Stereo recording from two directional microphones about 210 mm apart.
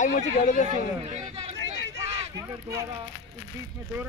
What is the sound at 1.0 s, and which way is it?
Speech, 30° right (ahead or behind).